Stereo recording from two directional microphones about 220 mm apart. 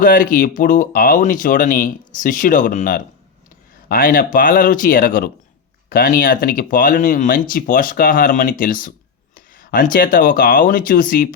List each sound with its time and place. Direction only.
0.0 s speech: 40° left (ahead or behind)